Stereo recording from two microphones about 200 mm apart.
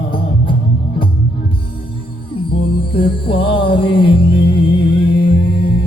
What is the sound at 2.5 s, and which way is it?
Music, 25° left (ahead or behind).